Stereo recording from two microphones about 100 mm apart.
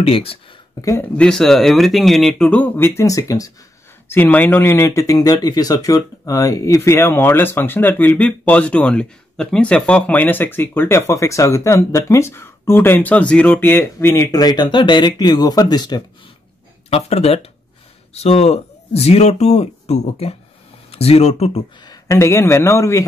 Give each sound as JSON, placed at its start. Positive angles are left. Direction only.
{"t": 0.0, "sound": "speech", "side_deg": 70}
{"t": 0.7, "sound": "speech", "side_deg": 35}
{"t": 1.1, "sound": "speech", "side_deg": 10}
{"t": 3.0, "sound": "speech", "side_deg": 35}
{"t": 4.1, "sound": "speech", "side_deg": 20}
{"t": 14.3, "sound": "speech", "side_deg": 40}
{"t": 16.9, "sound": "speech", "side_deg": 90}
{"t": 21.8, "sound": "speech", "side_deg": 35}